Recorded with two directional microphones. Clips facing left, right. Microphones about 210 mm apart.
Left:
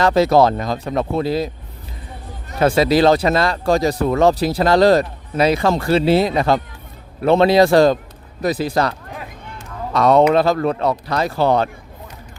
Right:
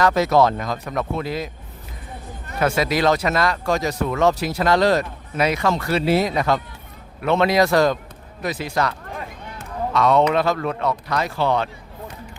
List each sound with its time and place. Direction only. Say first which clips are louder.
0.0 s speech: left 3 dB; 30° left (ahead or behind)
2.6 s speech: left 6 dB; 30° left (ahead or behind)